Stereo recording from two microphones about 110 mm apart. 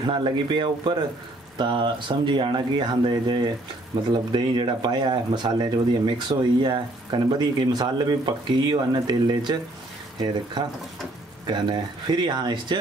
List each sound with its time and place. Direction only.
0.0 s speech: 45° right (ahead or behind)